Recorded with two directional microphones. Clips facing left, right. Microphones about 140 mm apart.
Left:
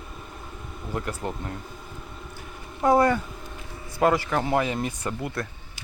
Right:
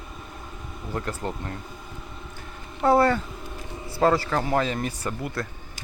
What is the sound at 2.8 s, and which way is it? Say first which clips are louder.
Speech: even; 15° left (ahead or behind).